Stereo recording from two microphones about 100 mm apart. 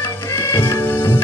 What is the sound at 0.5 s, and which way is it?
Music, 25° left (ahead or behind).